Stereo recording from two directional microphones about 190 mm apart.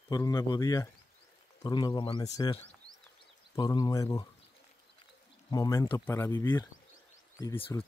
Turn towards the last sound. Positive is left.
turn(degrees=15)  # may be behind; listen again after turning